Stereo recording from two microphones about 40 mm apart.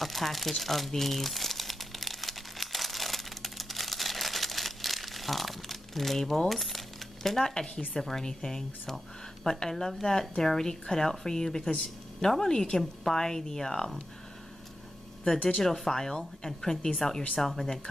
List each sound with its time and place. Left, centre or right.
0.0 s crumpling: centre
7.2 s speech: centre
8.9 s a sound: centre
9.6 s speech: centre
15.6 s speech: centre